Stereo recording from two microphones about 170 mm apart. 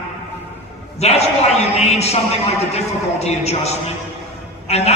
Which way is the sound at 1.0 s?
40° left (ahead or behind).